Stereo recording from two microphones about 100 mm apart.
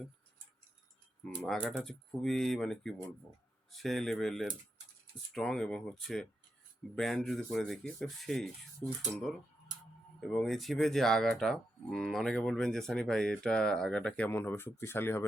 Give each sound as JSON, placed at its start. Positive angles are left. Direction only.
{"t": 1.4, "sound": "speech", "side_deg": 5}
{"t": 1.8, "sound": "cattle", "side_deg": 5}
{"t": 8.8, "sound": "speech", "side_deg": 20}
{"t": 10.3, "sound": "cattle", "side_deg": 5}
{"t": 14.3, "sound": "speech", "side_deg": 25}